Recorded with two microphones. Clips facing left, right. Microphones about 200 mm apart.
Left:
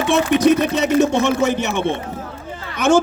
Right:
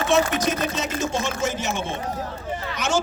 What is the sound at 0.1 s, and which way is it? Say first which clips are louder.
A man's voice: left 7 dB; 60° left (ahead or behind).